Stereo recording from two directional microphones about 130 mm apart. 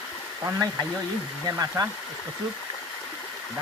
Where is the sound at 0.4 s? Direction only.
25° right (ahead or behind).